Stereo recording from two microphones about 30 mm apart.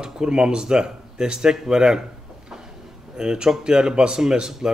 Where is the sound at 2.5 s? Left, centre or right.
Centre.